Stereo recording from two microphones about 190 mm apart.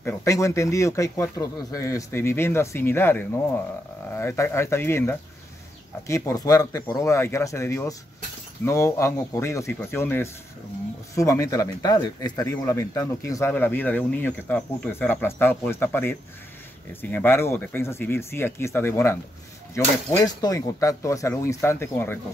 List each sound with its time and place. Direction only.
0.0 s speech: 15° left (ahead or behind)